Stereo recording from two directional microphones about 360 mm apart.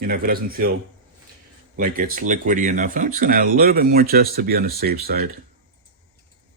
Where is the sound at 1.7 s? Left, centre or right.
Right.